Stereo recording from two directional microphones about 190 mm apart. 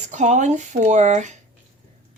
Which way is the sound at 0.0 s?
40° right (ahead or behind).